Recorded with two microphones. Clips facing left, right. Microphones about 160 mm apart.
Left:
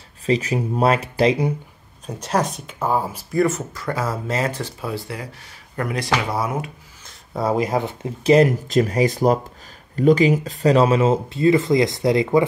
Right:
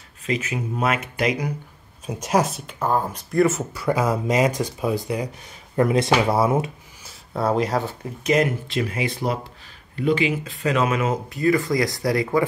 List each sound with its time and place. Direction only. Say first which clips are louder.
0.3 s speech: left 5 dB; 35° left (ahead or behind)
2.0 s speech: right 1 dB; 10° right (ahead or behind); by 6.7 s 25° right (ahead or behind)
7.1 s speech: left 1 dB; centre (ahead or behind); by 8.1 s 15° left (ahead or behind)
8.2 s speech: left 6 dB; 30° left (ahead or behind)